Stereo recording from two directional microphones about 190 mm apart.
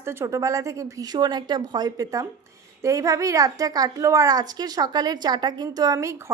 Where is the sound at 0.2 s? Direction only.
15° right (ahead or behind).